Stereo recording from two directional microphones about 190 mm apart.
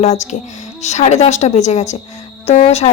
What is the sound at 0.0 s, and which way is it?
Speech, 35° left (ahead or behind).